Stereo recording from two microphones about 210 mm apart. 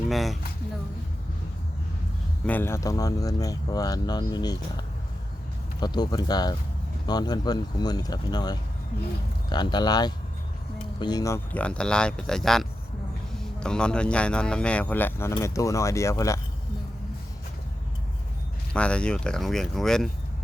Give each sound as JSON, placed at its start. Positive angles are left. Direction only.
{"t": 0.1, "sound": "speech", "side_deg": 0}
{"t": 2.5, "sound": "speech", "side_deg": 10}
{"t": 5.8, "sound": "speech", "side_deg": 20}
{"t": 18.7, "sound": "speech", "side_deg": 5}